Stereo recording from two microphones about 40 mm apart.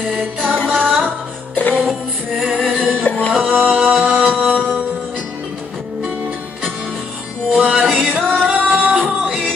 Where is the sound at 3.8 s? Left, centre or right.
Right.